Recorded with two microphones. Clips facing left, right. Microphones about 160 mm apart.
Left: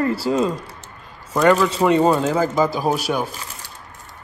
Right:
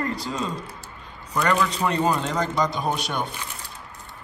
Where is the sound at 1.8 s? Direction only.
35° left (ahead or behind).